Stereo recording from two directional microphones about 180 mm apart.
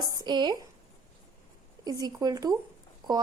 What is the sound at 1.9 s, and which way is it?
Speech, 20° right (ahead or behind).